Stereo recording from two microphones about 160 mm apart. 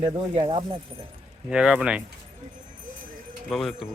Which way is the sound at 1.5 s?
5° right (ahead or behind).